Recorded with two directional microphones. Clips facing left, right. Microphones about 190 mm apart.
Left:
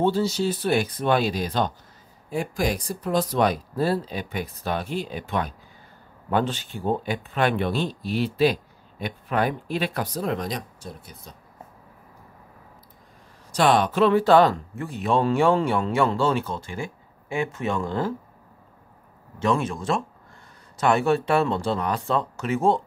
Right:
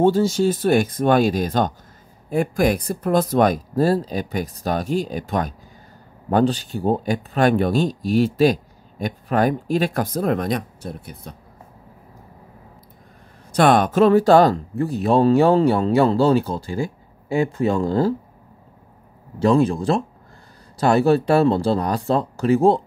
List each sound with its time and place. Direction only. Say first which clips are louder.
0.0 s speech: right 6 dB; 45° right (ahead or behind)
13.5 s speech: right 4 dB; 55° right (ahead or behind); by 18.1 s 35° right (ahead or behind)
19.4 s speech: right 7 dB; 35° right (ahead or behind)